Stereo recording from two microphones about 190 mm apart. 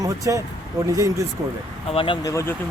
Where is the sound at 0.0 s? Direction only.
15° right (ahead or behind).